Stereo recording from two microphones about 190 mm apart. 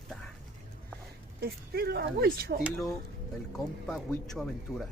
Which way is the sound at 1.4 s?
55° right (ahead or behind).